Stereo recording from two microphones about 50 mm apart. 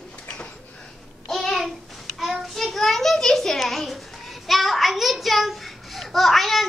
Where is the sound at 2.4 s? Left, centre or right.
Centre.